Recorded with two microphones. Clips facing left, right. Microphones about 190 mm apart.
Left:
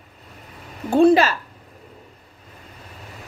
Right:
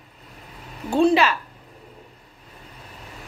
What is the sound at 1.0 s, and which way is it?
Speech, 45° left (ahead or behind).